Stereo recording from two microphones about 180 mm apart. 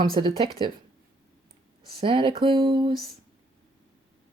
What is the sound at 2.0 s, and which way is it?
Speech, 25° right (ahead or behind).